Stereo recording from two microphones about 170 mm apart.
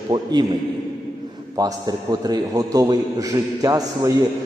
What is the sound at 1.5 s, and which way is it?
A man's voice, 20° right (ahead or behind).